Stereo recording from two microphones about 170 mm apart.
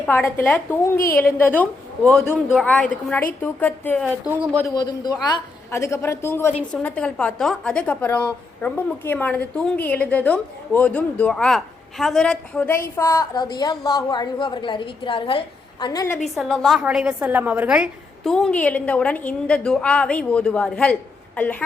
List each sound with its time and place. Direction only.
0.0 s a woman's voice: 10° left (ahead or behind)
16.3 s a woman's voice: centre (ahead or behind)